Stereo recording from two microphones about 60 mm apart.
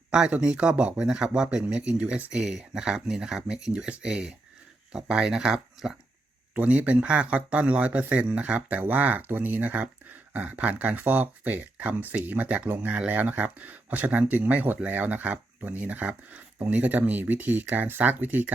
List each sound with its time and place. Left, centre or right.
0.3 s speech: centre
2.4 s speech: centre
6.5 s speech: centre